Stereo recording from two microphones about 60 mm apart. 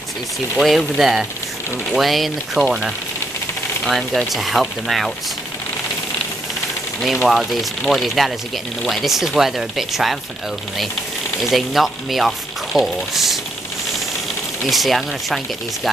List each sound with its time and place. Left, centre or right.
0.6 s speech: centre
3.8 s speech: centre
7.2 s speech: centre
11.4 s speech: centre
14.6 s speech: centre